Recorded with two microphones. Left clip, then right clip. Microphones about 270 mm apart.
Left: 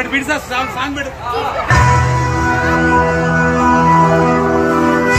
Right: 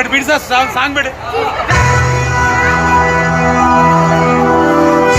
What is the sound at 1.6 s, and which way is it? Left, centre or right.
Music, right.